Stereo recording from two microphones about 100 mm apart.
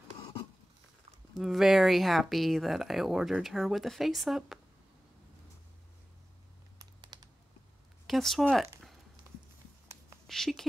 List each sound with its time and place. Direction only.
0.2 s a sound: 55° left (ahead or behind)
1.3 s speech: centre (ahead or behind)
7.0 s computer keyboard: 45° right (ahead or behind)
8.1 s speech: centre (ahead or behind)
10.2 s speech: 5° left (ahead or behind)